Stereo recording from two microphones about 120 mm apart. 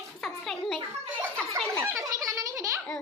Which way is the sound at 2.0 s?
25° right (ahead or behind).